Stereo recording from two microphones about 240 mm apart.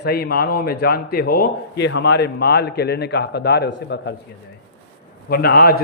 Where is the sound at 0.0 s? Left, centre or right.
Left.